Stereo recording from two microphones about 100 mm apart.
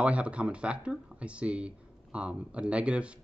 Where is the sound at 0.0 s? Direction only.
10° right (ahead or behind).